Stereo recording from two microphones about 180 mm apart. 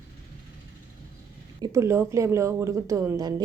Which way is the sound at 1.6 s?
15° right (ahead or behind).